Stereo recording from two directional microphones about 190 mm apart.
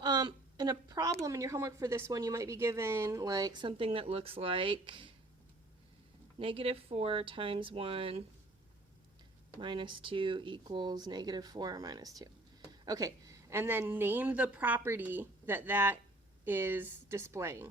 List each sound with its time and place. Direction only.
0.0 s a sound: 20° right (ahead or behind)
1.2 s speech: 15° right (ahead or behind)
6.4 s speech: 30° right (ahead or behind)
9.6 s speech: 25° right (ahead or behind)